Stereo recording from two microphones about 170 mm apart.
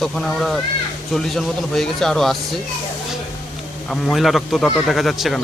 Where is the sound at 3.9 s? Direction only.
Centre (ahead or behind).